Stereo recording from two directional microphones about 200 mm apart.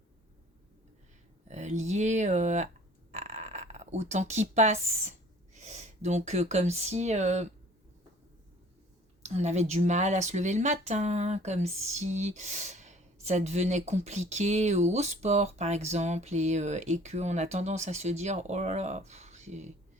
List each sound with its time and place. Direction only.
1.5 s speech: 35° right (ahead or behind)
3.1 s a sound: 35° right (ahead or behind)
5.5 s speech: 35° right (ahead or behind)
9.2 s speech: 35° right (ahead or behind)